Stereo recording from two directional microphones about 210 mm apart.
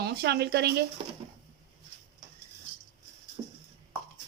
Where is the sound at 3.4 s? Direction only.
20° right (ahead or behind).